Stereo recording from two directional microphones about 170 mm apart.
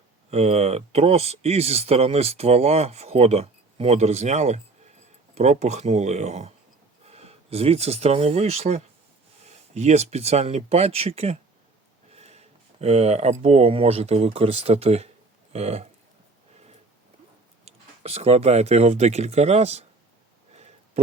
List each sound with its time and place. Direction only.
0.3 s speech: 40° right (ahead or behind)
17.7 s speech: 35° right (ahead or behind)
20.5 s a sound: 40° right (ahead or behind)